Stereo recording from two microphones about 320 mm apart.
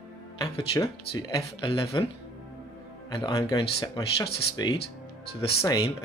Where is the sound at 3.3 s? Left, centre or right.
Centre.